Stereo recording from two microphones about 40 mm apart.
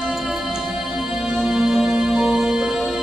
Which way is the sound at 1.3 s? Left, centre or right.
Centre.